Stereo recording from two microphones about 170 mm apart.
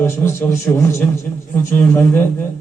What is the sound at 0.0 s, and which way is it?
A man's voice, 15° left (ahead or behind).